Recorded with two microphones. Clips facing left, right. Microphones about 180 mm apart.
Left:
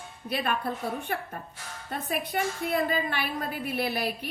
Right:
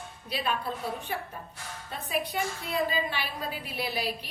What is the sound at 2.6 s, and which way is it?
A woman's voice, 55° left (ahead or behind).